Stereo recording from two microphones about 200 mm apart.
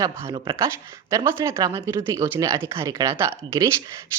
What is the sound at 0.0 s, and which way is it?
A woman's voice, 15° right (ahead or behind).